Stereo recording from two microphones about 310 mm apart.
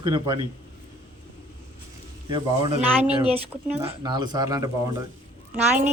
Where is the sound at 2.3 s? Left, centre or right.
Centre.